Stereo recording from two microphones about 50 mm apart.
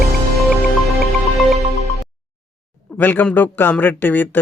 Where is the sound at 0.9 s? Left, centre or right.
Centre.